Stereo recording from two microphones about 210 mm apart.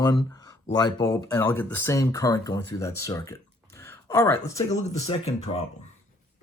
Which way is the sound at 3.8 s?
15° left (ahead or behind).